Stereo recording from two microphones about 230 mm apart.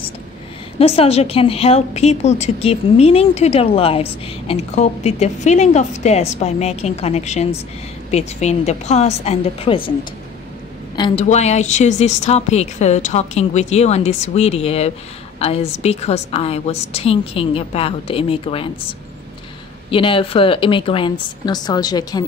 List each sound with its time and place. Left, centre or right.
0.7 s a woman's voice: left
11.0 s a woman's voice: left
19.9 s a woman's voice: left